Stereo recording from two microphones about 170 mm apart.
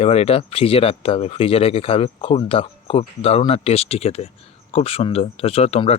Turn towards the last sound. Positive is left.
turn(degrees=35)  # may be behind; listen again after turning